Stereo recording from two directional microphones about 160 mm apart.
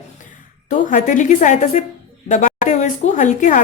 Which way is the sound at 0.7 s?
55° left (ahead or behind).